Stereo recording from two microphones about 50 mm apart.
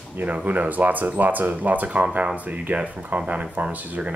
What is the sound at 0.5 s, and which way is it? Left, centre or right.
Speech, right.